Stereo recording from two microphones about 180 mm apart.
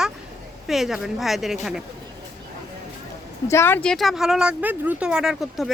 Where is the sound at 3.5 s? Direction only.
15° left (ahead or behind).